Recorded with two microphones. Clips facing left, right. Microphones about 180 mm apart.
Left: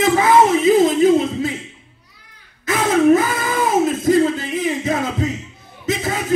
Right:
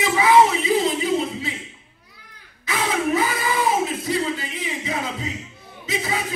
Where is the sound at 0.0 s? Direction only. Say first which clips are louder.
Left 3 dB; 50° left (ahead or behind).